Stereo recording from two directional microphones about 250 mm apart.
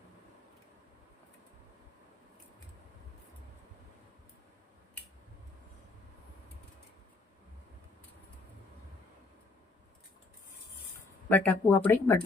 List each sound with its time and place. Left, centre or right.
11.3 s speech: centre